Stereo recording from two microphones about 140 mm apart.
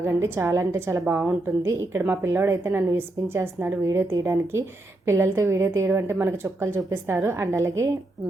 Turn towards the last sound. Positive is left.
turn(degrees=-20)  # may be behind; listen again after turning